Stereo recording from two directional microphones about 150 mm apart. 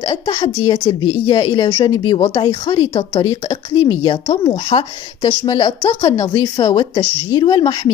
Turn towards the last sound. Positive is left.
turn(degrees=30)  # may be behind; listen again after turning